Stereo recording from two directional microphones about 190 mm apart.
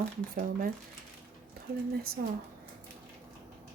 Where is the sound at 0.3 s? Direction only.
50° right (ahead or behind).